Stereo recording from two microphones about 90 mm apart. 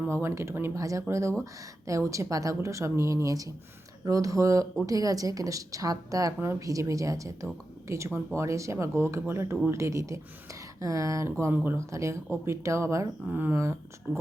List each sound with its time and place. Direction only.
0.1 s speech: 30° right (ahead or behind)
11.5 s speech: 25° right (ahead or behind)
11.9 s speech: 35° right (ahead or behind)
13.2 s speech: 20° right (ahead or behind)